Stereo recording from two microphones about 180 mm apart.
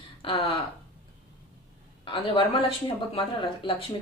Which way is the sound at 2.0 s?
30° left (ahead or behind).